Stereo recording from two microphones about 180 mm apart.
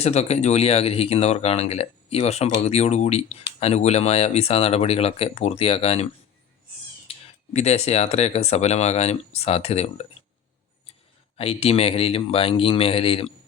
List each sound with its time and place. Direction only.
0.0 s speech: 35° left (ahead or behind)
7.1 s speech: 35° left (ahead or behind)
11.3 s speech: 35° left (ahead or behind)